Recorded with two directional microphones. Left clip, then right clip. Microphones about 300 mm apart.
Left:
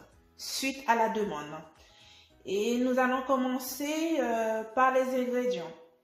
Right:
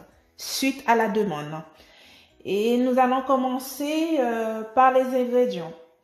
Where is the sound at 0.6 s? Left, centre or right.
Right.